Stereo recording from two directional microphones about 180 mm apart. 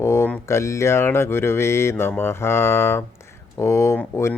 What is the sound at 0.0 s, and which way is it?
Speech, 15° left (ahead or behind).